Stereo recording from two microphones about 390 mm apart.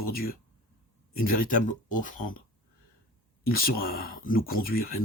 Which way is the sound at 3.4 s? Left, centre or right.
Left.